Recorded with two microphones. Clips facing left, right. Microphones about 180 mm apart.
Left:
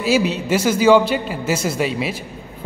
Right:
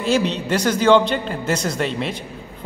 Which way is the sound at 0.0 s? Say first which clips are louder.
Left 1 dB; 5° left (ahead or behind).